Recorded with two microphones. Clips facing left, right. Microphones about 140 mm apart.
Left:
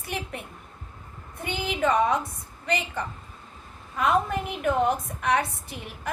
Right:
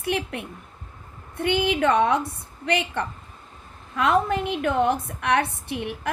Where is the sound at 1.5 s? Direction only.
70° right (ahead or behind).